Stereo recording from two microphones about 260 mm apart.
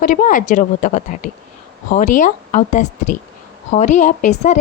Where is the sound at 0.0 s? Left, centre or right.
Left.